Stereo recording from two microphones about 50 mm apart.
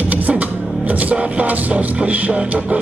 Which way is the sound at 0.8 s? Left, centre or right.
Right.